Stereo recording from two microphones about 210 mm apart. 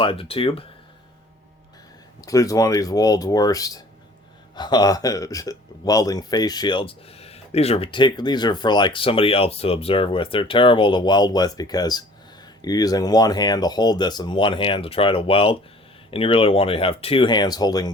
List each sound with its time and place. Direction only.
0.0 s speech: 25° left (ahead or behind)
2.2 s speech: 15° left (ahead or behind)